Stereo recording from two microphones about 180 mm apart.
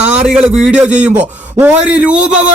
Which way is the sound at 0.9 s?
40° right (ahead or behind).